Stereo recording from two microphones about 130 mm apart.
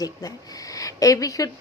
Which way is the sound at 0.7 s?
25° left (ahead or behind).